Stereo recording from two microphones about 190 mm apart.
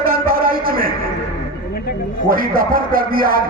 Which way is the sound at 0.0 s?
50° right (ahead or behind).